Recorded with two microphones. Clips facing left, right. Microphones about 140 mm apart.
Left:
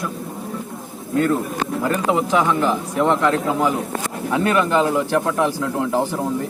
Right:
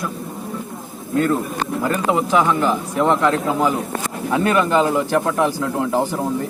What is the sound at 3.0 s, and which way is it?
Speech, 15° right (ahead or behind).